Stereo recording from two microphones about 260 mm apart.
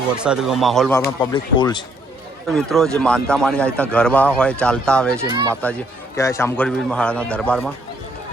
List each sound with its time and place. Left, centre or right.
0.2 s speech: centre
1.2 s speech: centre
2.5 s speech: centre
5.3 s speech: centre
6.1 s speech: centre